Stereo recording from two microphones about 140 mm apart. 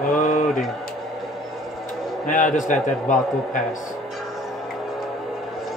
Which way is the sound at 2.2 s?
65° left (ahead or behind).